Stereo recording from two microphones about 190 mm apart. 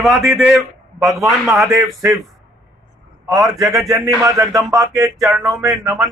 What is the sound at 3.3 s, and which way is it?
Speech, centre (ahead or behind).